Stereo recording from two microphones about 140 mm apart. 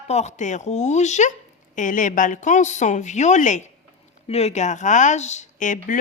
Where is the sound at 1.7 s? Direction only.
65° left (ahead or behind).